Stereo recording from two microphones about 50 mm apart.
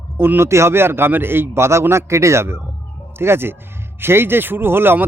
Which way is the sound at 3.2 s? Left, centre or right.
Right.